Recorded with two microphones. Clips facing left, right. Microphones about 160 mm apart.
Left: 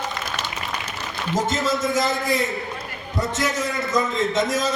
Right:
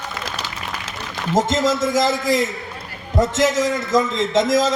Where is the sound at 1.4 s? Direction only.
90° right.